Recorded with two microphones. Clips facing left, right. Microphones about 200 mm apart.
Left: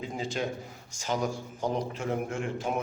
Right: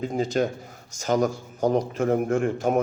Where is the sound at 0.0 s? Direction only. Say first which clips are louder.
Right 8 dB; 45° right (ahead or behind).